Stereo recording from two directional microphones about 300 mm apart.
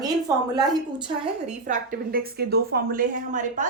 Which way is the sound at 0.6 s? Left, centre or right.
Centre.